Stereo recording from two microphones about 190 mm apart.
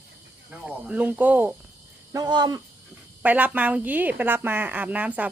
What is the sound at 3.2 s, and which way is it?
A woman's voice, 10° right (ahead or behind).